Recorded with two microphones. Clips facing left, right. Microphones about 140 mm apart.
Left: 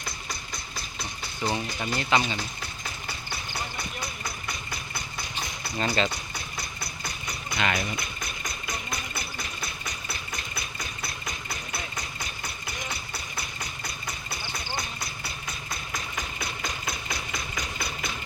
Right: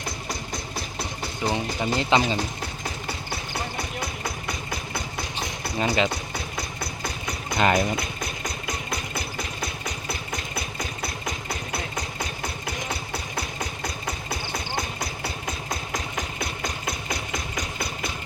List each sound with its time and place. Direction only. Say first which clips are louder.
1.5 s speech: right 4 dB; 20° right (ahead or behind)
5.8 s speech: right 3 dB; 15° right (ahead or behind)
7.5 s speech: right 7 dB; 40° right (ahead or behind)
15.7 s music: right 4 dB; 45° right (ahead or behind)